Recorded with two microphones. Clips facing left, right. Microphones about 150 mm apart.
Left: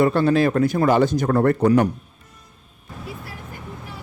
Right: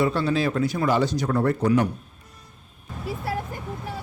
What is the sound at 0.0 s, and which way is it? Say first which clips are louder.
Speech: left 5 dB; 50° left (ahead or behind).